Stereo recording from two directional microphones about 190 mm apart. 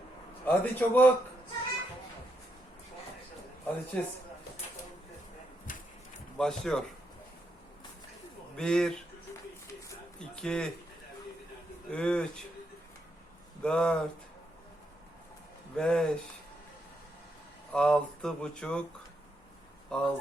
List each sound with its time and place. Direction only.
0.4 s a man's voice: 10° left (ahead or behind)
3.9 s a man's voice: 10° left (ahead or behind)
5.7 s a sound: 45° left (ahead or behind)
6.3 s speech: 5° left (ahead or behind)
8.5 s speech: 5° left (ahead or behind)
10.2 s speech: 5° left (ahead or behind)
11.9 s speech: 5° left (ahead or behind)
13.6 s speech: 5° left (ahead or behind)
15.7 s speech: 5° left (ahead or behind)
17.7 s speech: 5° left (ahead or behind)
19.9 s speech: 5° left (ahead or behind)